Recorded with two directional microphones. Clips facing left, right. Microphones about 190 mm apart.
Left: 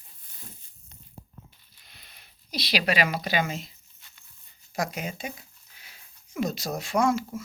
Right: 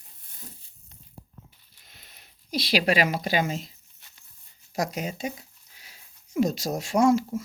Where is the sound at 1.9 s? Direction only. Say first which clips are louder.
Right 1 dB; 45° right (ahead or behind).